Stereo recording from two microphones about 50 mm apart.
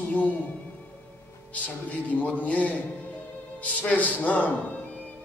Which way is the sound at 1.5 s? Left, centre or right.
Left.